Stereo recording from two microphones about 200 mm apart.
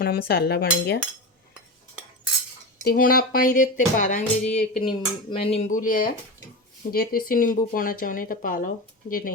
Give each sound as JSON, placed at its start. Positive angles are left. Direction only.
{"t": 0.0, "sound": "speech", "side_deg": 50}
{"t": 2.8, "sound": "speech", "side_deg": 45}
{"t": 4.5, "sound": "a sound", "side_deg": 30}
{"t": 5.9, "sound": "speech", "side_deg": 45}